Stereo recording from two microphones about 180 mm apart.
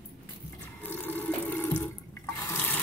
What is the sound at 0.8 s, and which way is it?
Water, 10° left (ahead or behind).